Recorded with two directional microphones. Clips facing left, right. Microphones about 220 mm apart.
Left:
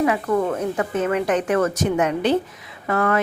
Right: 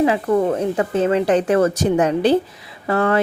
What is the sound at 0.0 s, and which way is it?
A woman's voice, 30° right (ahead or behind).